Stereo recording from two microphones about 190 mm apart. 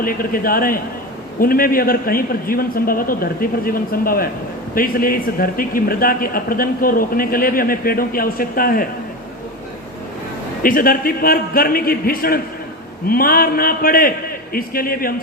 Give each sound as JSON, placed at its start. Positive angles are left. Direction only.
{"t": 0.0, "sound": "a man's voice", "side_deg": 50}
{"t": 10.6, "sound": "a man's voice", "side_deg": 50}